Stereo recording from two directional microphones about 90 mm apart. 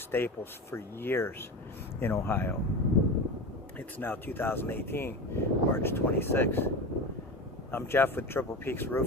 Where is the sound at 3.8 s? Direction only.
20° left (ahead or behind).